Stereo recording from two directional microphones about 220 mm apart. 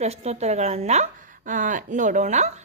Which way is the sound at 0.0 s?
30° right (ahead or behind).